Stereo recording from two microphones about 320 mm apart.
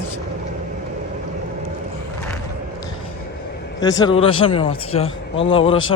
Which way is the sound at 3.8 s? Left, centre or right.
Centre.